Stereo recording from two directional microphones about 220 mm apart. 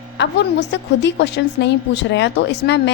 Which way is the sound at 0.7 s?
50° left (ahead or behind).